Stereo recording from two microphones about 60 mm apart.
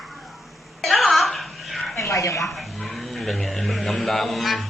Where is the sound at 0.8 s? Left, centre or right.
Centre.